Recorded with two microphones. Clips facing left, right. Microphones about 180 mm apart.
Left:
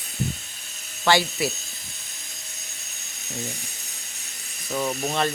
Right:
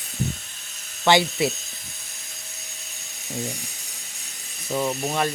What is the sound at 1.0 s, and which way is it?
Speech, 20° right (ahead or behind).